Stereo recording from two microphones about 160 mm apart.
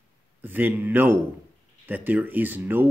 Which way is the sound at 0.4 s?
10° right (ahead or behind).